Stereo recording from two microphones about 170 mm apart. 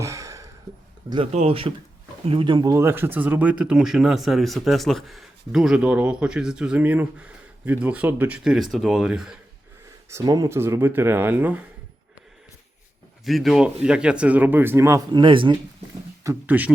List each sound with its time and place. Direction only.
0.0 s a sound: 20° right (ahead or behind)
1.1 s speech: 35° right (ahead or behind); by 9.4 s 5° right (ahead or behind)
10.1 s speech: 20° right (ahead or behind)
13.2 s speech: centre (ahead or behind); by 15.5 s 30° right (ahead or behind)
16.2 s speech: 10° right (ahead or behind)